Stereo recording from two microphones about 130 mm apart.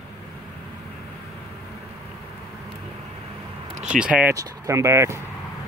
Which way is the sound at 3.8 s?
5° right (ahead or behind).